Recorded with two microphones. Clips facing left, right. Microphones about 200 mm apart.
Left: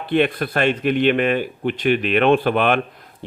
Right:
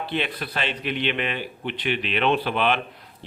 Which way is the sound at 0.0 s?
50° left (ahead or behind).